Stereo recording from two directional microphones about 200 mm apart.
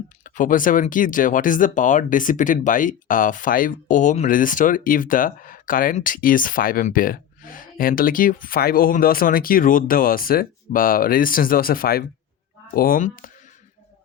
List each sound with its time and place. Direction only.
0.3 s speech: 40° left (ahead or behind)